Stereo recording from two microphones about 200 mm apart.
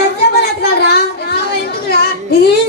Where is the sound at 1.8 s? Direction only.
50° left (ahead or behind).